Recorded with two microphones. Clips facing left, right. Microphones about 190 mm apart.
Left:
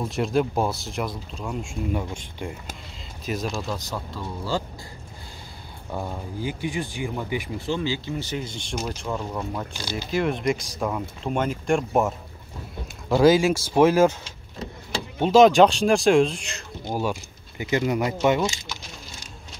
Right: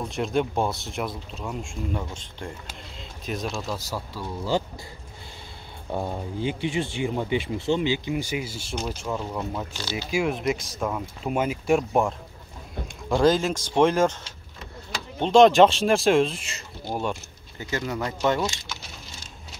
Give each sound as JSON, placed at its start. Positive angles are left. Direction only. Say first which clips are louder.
{"t": 0.0, "sound": "speech", "louder": "left 2 dB", "side_deg": 0}
{"t": 5.9, "sound": "speech", "louder": "right 2 dB", "side_deg": -20}
{"t": 9.8, "sound": "speech", "louder": "even", "side_deg": 15}
{"t": 10.1, "sound": "speech", "louder": "left 1 dB", "side_deg": -5}
{"t": 17.6, "sound": "speech", "louder": "left 6 dB", "side_deg": 15}